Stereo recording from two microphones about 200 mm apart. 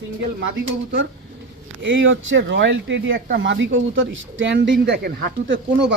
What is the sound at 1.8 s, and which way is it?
Speech, 70° right (ahead or behind).